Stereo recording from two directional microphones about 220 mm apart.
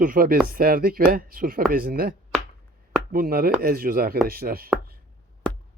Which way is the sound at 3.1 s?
40° right (ahead or behind).